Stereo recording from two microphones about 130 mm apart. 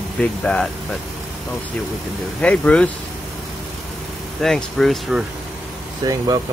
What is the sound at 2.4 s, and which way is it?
Speech, 10° left (ahead or behind).